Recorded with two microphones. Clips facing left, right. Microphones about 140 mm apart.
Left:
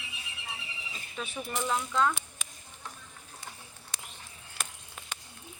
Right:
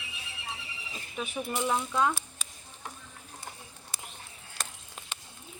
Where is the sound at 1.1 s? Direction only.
15° right (ahead or behind).